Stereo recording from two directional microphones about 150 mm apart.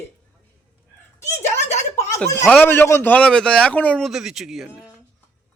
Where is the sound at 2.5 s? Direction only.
10° left (ahead or behind).